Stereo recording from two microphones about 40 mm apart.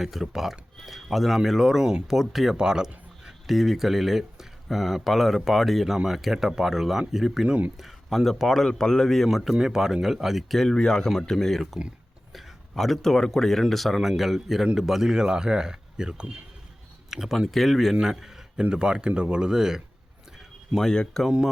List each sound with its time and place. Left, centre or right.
0.0 s a man's voice: centre
2.6 s speech: centre
3.4 s a man's voice: centre
9.0 s a man's voice: centre
10.5 s speech: centre
12.3 s a man's voice: centre; by 16.4 s right
17.1 s a man's voice: centre
18.0 s a sound: centre
18.7 s speech: right
20.8 s speech: centre